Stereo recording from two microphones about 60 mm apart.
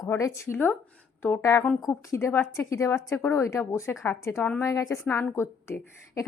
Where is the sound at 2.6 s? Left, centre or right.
Left.